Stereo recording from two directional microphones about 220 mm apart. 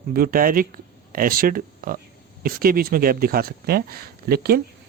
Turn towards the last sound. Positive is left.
turn(degrees=-45)  # may be behind; listen again after turning